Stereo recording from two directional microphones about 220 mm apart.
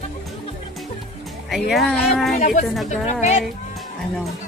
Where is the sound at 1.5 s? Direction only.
Centre (ahead or behind).